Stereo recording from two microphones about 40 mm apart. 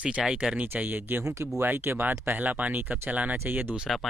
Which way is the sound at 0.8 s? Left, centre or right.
Right.